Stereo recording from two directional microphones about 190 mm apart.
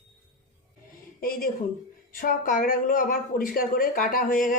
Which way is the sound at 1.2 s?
50° left (ahead or behind).